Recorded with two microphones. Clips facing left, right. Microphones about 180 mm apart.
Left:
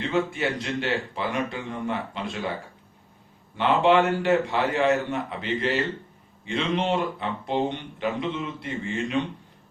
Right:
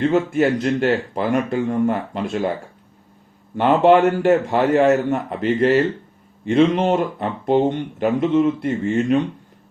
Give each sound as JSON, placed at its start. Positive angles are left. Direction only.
{"t": 0.0, "sound": "speech", "side_deg": -45}
{"t": 3.5, "sound": "speech", "side_deg": -45}